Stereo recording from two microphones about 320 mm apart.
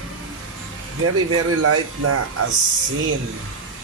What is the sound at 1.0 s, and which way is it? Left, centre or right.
Speech, right.